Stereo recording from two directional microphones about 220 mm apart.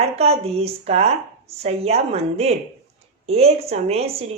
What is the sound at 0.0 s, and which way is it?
Speech, 30° right (ahead or behind).